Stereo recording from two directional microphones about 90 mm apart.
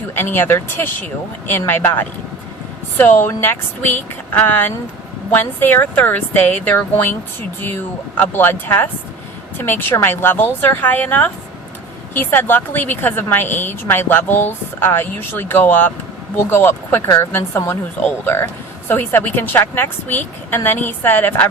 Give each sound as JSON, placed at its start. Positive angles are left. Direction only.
{"t": 0.1, "sound": "a woman's voice", "side_deg": 25}
{"t": 18.9, "sound": "a woman's voice", "side_deg": 25}